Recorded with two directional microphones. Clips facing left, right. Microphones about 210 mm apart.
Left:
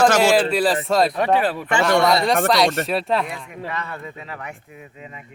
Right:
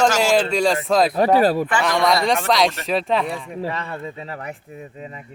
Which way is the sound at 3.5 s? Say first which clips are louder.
Right 3 dB; 30° right (ahead or behind).